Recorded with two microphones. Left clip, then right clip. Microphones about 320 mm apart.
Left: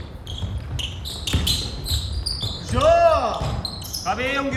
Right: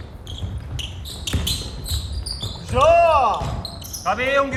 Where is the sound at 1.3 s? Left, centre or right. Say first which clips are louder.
Left 2 dB; centre.